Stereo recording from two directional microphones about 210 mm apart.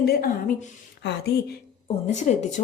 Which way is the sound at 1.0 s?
55° left (ahead or behind).